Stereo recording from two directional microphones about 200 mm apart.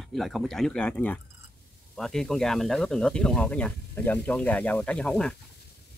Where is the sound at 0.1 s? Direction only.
Centre (ahead or behind).